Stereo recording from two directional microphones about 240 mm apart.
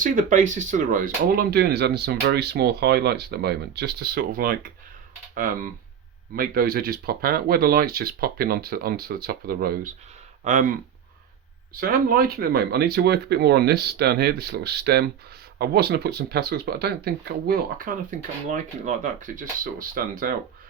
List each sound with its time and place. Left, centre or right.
0.0 s speech: right
6.3 s speech: right